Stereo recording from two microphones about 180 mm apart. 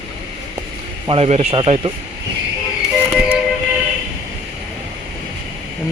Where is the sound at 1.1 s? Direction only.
35° right (ahead or behind).